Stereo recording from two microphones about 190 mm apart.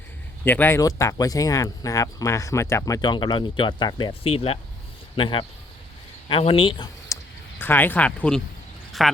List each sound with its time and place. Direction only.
0.4 s speech: 10° left (ahead or behind); by 6.8 s 30° left (ahead or behind)
7.1 s a sound: 15° left (ahead or behind)
7.6 s speech: 10° left (ahead or behind)